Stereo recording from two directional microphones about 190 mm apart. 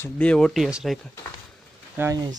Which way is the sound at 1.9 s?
15° right (ahead or behind).